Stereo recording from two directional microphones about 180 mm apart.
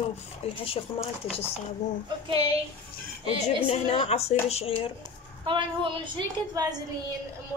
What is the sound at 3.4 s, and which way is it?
A woman's voice, 35° left (ahead or behind).